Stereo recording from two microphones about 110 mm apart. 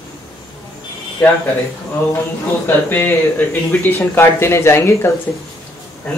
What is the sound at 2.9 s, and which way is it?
Speech, 20° left (ahead or behind).